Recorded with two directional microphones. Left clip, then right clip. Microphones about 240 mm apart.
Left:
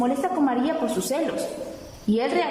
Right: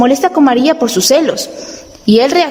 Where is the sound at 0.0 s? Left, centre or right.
Right.